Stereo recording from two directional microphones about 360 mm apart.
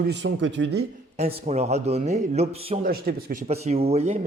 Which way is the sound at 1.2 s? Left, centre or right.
Centre.